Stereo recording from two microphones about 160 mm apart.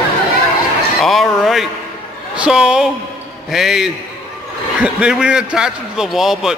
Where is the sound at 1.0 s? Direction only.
Centre (ahead or behind).